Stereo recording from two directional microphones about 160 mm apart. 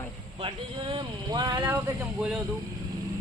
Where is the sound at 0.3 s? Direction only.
35° right (ahead or behind).